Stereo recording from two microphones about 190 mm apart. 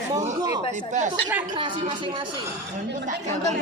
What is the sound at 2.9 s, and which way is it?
Speech, 40° right (ahead or behind).